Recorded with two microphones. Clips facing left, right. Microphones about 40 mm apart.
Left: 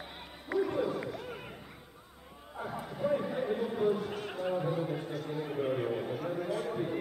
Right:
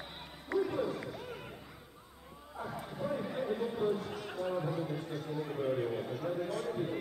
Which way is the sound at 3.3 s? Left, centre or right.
Left.